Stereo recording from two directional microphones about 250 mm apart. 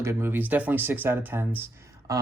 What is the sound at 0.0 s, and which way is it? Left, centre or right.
Speech, centre.